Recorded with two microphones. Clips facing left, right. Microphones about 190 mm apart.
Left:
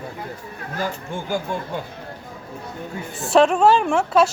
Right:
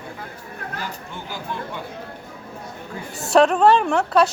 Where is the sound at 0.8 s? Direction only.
50° left (ahead or behind).